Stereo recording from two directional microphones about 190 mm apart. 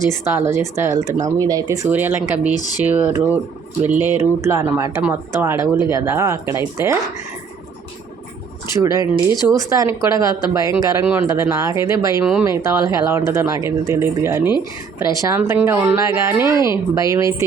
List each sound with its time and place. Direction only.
0.1 s speech: 15° right (ahead or behind)
8.7 s speech: 15° right (ahead or behind)
12.2 s speech: 5° right (ahead or behind)
12.5 s speech: 15° right (ahead or behind)